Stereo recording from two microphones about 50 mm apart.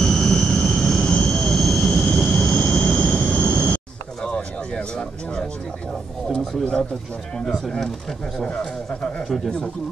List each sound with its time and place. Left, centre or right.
0.0 s vehicle: centre
6.2 s speech: centre